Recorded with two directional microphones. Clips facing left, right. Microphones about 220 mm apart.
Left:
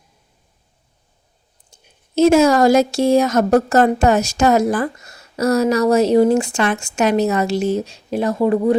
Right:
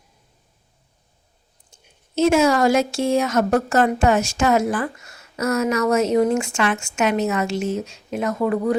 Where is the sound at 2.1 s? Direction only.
40° left (ahead or behind).